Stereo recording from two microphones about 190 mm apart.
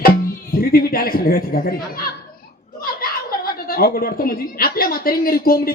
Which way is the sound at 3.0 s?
50° left (ahead or behind).